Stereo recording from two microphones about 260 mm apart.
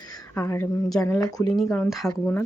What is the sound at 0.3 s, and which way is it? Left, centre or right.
Speech, centre.